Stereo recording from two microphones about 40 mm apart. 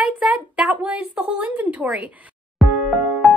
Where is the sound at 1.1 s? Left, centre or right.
Right.